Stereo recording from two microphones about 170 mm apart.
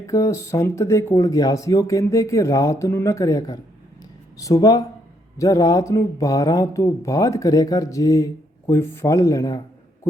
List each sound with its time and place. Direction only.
0.0 s speech: 20° left (ahead or behind)